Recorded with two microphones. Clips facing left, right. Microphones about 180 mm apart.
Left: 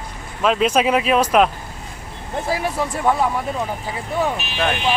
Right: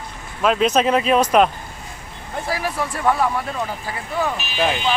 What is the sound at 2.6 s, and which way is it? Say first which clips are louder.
Speech: even; 20° left (ahead or behind).